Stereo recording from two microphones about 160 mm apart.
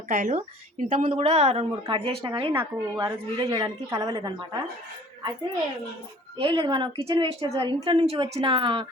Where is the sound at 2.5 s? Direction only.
20° right (ahead or behind).